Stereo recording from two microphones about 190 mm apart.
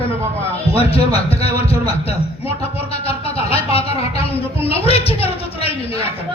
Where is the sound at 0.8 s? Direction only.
30° left (ahead or behind).